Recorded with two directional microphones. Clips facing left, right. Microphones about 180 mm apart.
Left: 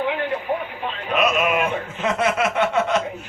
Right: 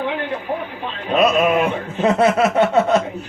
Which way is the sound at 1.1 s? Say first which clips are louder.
Right 5 dB; 35° right (ahead or behind).